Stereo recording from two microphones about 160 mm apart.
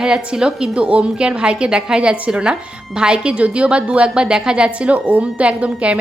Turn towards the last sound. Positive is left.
turn(degrees=-5)  # may be behind; listen again after turning